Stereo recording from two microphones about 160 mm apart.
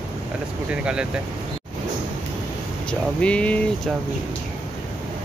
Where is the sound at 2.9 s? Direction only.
5° left (ahead or behind).